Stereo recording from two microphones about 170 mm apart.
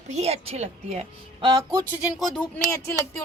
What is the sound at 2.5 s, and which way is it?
Speech, 15° left (ahead or behind).